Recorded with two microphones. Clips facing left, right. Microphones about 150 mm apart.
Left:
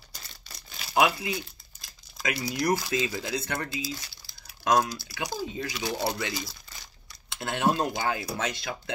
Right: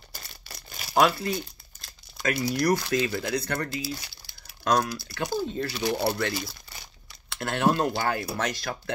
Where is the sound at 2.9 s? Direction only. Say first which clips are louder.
Right 3 dB; 55° right (ahead or behind).